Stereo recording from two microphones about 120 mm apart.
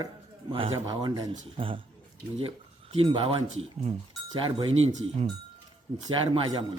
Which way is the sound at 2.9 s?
50° right (ahead or behind).